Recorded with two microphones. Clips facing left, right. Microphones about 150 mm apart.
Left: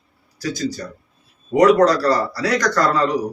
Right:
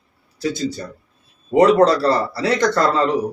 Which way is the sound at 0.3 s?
25° right (ahead or behind).